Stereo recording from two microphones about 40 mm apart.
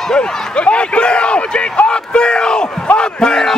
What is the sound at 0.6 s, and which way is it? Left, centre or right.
A man's voice, left.